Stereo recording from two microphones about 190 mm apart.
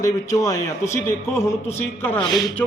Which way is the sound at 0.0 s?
15° left (ahead or behind).